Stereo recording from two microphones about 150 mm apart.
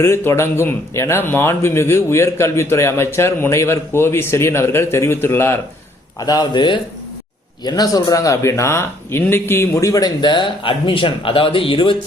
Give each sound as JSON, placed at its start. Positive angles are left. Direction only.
{"t": 0.0, "sound": "speech", "side_deg": 15}